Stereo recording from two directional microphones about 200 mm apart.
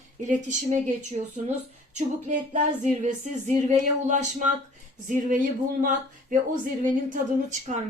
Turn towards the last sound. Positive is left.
turn(degrees=-40)  # may be behind; listen again after turning